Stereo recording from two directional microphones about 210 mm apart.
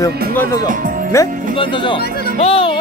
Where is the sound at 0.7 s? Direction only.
40° right (ahead or behind).